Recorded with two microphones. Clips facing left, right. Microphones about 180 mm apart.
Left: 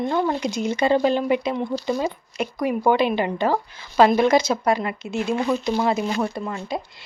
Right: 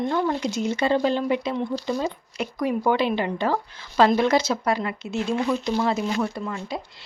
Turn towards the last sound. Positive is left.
turn(degrees=20)  # may be behind; listen again after turning